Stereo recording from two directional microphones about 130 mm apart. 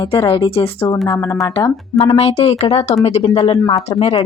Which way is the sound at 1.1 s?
25° left (ahead or behind).